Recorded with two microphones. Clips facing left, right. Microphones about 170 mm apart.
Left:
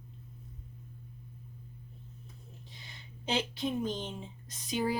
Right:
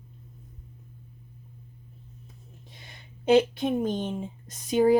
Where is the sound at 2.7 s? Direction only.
50° right (ahead or behind).